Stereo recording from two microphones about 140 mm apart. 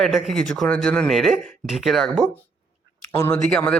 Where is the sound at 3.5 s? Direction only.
5° left (ahead or behind).